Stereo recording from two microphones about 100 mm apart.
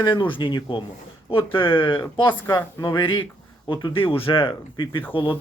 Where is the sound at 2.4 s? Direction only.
35° left (ahead or behind).